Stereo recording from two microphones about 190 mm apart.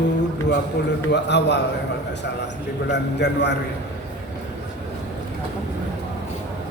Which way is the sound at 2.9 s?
65° left (ahead or behind).